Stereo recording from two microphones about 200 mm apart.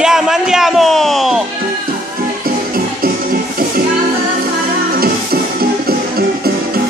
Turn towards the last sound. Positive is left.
turn(degrees=-50)  # may be behind; listen again after turning